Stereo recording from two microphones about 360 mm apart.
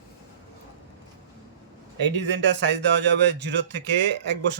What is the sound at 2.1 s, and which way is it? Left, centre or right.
Speech, right.